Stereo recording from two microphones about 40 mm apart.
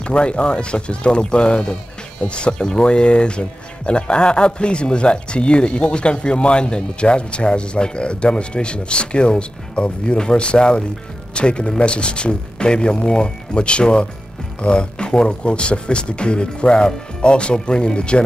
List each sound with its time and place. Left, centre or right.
0.0 s speech: left